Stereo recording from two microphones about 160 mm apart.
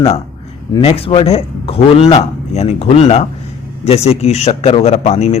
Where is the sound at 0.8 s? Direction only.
35° left (ahead or behind).